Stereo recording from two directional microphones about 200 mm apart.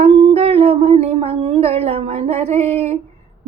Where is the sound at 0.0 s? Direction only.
30° right (ahead or behind).